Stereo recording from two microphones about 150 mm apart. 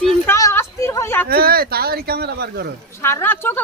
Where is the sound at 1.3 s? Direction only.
90° right.